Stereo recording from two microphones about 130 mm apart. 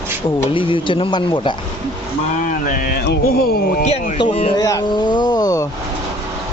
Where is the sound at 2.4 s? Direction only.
90° left.